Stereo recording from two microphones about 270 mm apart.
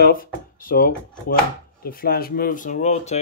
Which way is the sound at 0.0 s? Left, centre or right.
Left.